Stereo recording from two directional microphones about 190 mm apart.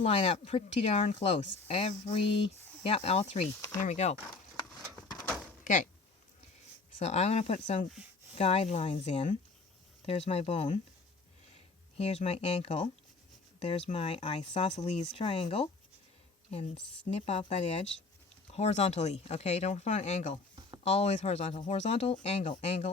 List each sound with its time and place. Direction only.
0.0 s speech: 30° left (ahead or behind)
5.0 s a sound: 20° left (ahead or behind)
6.9 s speech: 35° left (ahead or behind)
17.2 s speech: 35° left (ahead or behind)